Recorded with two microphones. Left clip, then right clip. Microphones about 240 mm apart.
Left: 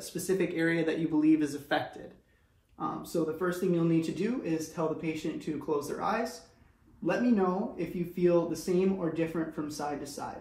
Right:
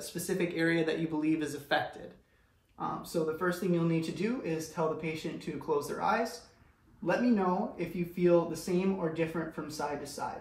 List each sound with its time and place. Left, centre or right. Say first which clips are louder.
0.0 s speech: left 3 dB; right
2.8 s speech: left 1 dB; right